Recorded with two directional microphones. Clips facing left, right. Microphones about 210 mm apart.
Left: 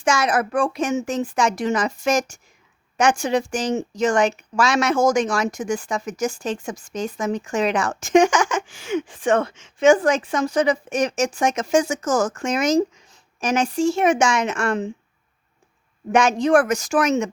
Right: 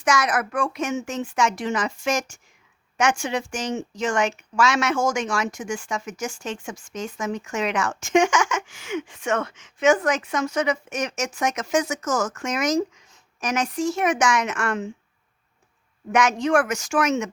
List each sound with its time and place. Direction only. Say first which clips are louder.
0.0 s a woman's voice: left 3 dB; 30° left (ahead or behind)
16.1 s a woman's voice: left 4 dB; 30° left (ahead or behind)